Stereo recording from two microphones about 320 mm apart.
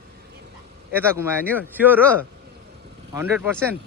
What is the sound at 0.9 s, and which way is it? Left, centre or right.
Speech, centre.